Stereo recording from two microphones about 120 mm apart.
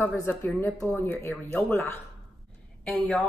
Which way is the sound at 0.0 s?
20° left (ahead or behind).